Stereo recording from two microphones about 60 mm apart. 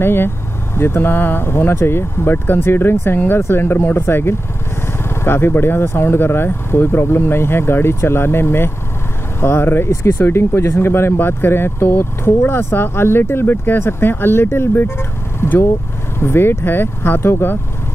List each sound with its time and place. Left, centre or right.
0.0 s speech: left